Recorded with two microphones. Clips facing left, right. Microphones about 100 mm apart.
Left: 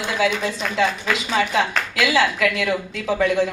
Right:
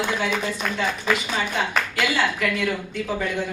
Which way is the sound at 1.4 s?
90° left.